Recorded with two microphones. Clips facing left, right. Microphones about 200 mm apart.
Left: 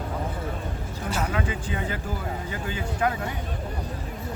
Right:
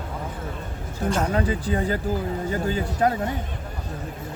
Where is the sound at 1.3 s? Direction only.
40° right (ahead or behind).